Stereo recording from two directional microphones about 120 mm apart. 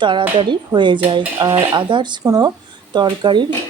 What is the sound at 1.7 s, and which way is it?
Speech, 40° right (ahead or behind).